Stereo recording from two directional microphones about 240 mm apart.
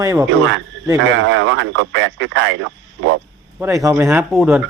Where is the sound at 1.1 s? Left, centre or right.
Right.